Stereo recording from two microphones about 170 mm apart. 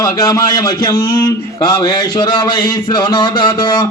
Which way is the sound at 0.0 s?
20° left (ahead or behind).